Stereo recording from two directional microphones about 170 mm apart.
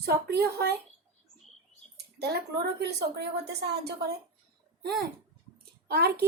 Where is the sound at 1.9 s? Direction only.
70° right (ahead or behind).